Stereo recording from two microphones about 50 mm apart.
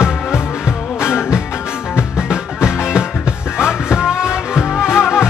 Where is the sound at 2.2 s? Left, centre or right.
Centre.